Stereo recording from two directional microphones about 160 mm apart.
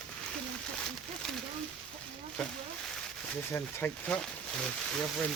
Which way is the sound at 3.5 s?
10° left (ahead or behind).